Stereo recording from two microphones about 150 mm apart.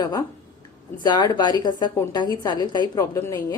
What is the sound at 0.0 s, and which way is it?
A woman's voice, 25° left (ahead or behind).